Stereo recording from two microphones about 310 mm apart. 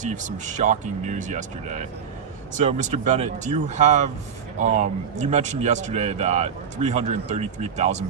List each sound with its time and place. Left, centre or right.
0.0 s speech: right